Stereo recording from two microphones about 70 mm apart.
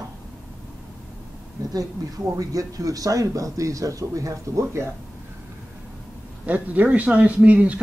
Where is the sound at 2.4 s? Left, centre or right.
Right.